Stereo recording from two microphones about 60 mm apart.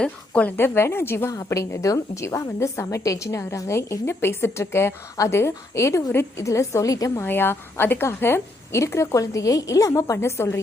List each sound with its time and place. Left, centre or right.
0.0 s speech: centre
0.5 s a woman's voice: left
1.5 s a woman's voice: left
7.3 s a woman's voice: left